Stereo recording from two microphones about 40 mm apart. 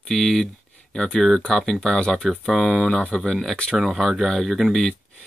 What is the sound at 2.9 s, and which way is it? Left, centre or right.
Speech, left.